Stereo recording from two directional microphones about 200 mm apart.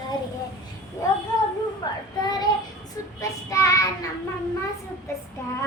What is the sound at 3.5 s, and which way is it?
Child singing, 15° left (ahead or behind).